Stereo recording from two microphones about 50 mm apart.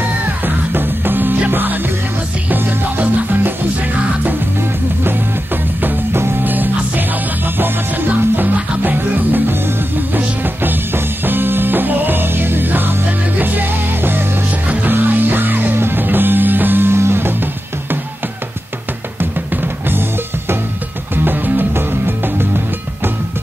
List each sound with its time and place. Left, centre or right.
0.7 s music: right
5.8 s music: right
14.7 s music: right
16.9 s music: right
19.1 s music: right